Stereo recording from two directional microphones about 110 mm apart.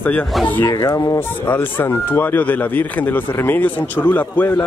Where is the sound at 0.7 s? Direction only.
35° left (ahead or behind).